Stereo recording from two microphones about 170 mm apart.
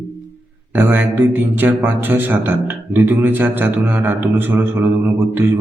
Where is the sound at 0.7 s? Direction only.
10° right (ahead or behind).